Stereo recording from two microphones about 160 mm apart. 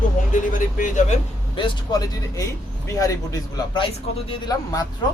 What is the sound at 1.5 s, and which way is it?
Speech, 25° left (ahead or behind).